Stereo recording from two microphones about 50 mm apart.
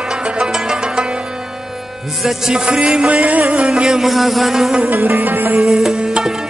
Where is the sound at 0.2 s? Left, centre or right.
Centre.